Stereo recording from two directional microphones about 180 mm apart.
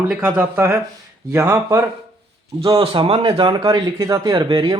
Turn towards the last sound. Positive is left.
turn(degrees=-25)  # may be behind; listen again after turning